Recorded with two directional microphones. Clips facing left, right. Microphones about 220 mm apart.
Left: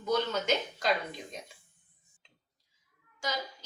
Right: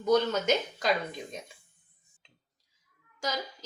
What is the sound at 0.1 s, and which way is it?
Speech, 50° right (ahead or behind).